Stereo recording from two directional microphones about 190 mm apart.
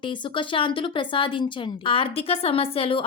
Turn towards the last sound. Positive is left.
turn(degrees=30)  # may be behind; listen again after turning